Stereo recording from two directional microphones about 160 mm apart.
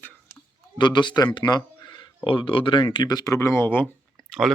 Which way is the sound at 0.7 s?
30° left (ahead or behind).